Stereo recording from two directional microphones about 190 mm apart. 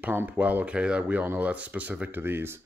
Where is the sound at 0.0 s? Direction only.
10° right (ahead or behind).